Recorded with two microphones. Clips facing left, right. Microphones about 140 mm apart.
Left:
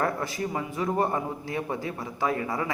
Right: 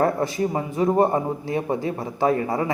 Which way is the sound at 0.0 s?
25° right (ahead or behind).